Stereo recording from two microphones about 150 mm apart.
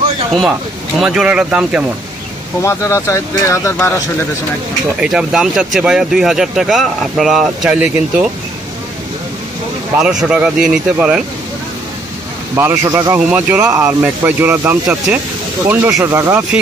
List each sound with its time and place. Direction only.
0.9 s speech: 5° right (ahead or behind)
2.6 s speech: 20° left (ahead or behind)
5.0 s speech: 5° right (ahead or behind)
9.9 s speech: 5° right (ahead or behind)
12.5 s speech: 20° right (ahead or behind)
13.2 s speech: 10° right (ahead or behind)